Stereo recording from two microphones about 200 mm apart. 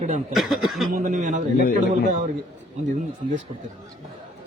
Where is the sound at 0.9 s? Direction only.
40° right (ahead or behind).